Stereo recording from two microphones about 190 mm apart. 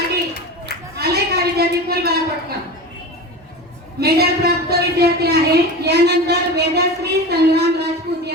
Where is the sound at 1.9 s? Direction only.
55° right (ahead or behind).